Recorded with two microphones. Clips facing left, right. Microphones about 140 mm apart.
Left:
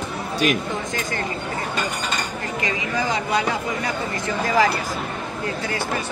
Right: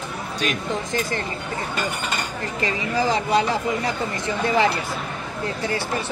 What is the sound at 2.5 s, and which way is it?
Speech, 30° right (ahead or behind).